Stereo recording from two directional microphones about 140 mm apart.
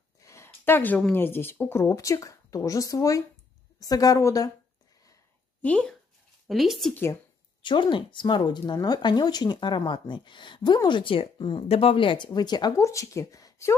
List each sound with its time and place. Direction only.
0.2 s a woman's voice: 20° left (ahead or behind)
5.6 s speech: 10° left (ahead or behind)
6.9 s speech: 15° left (ahead or behind)
7.6 s speech: 35° left (ahead or behind)